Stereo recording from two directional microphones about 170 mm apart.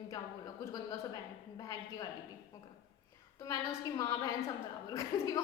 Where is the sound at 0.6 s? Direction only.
20° left (ahead or behind).